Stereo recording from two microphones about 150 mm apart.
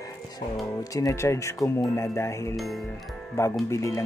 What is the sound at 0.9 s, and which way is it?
Speech, 20° left (ahead or behind).